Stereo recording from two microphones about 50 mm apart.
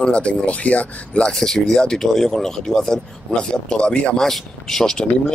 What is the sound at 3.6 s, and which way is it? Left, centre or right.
Speech, left.